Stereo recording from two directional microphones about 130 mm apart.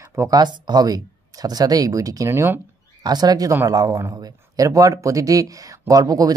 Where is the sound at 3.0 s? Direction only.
30° right (ahead or behind).